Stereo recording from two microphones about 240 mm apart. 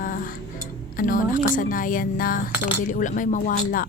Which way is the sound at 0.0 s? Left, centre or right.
Left.